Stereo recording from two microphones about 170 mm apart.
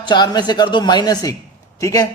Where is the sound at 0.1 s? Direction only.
25° left (ahead or behind).